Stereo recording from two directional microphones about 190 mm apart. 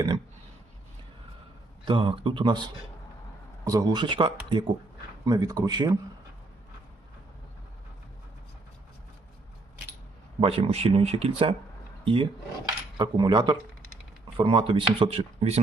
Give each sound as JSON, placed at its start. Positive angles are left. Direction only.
{"t": 1.8, "sound": "speech", "side_deg": -25}
{"t": 10.4, "sound": "speech", "side_deg": -30}